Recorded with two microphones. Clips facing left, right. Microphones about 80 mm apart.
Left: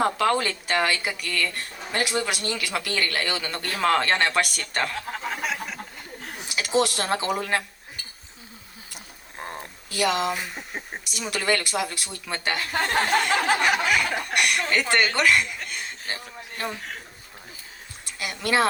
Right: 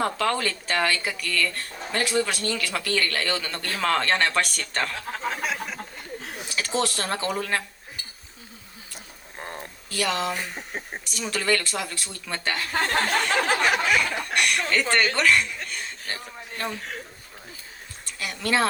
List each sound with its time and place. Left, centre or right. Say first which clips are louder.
0.0 s speech: left 2 dB; left; by 5.8 s centre
6.6 s speech: left 3 dB; centre
9.9 s speech: left 2 dB; centre
18.2 s speech: left 1 dB; centre